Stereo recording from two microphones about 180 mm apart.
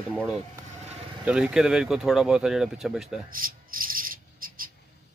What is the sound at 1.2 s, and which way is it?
Speech, 5° right (ahead or behind).